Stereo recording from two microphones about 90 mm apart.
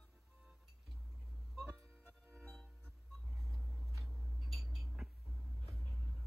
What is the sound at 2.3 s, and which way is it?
Music, 15° left (ahead or behind).